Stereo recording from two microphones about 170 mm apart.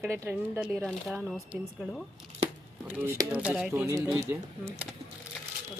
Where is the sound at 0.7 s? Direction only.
5° left (ahead or behind); by 4.8 s 15° right (ahead or behind).